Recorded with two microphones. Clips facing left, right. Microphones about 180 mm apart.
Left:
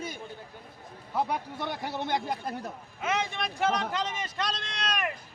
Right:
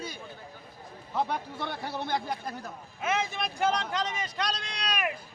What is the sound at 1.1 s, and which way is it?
Speech, 10° left (ahead or behind).